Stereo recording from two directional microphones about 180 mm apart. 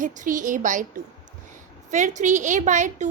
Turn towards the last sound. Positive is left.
turn(degrees=-40)  # may be behind; listen again after turning